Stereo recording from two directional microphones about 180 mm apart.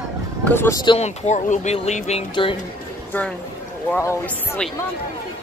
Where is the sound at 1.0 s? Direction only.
40° left (ahead or behind).